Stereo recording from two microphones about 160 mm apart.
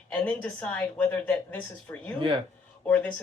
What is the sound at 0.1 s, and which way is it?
A woman's voice, 10° left (ahead or behind).